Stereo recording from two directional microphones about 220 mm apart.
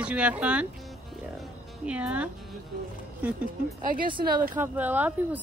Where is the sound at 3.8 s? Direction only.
40° right (ahead or behind).